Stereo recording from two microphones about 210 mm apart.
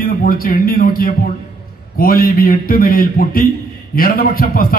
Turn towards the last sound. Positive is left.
turn(degrees=45)  # may be behind; listen again after turning